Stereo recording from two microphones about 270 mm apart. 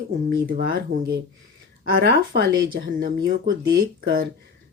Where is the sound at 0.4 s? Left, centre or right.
Right.